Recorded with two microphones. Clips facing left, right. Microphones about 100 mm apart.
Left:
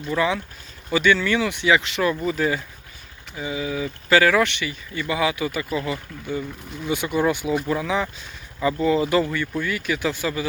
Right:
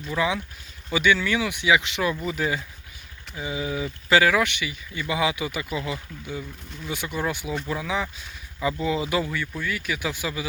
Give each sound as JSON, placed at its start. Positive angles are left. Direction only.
{"t": 0.0, "sound": "speech", "side_deg": -5}
{"t": 4.2, "sound": "speech", "side_deg": -10}
{"t": 6.8, "sound": "speech", "side_deg": 0}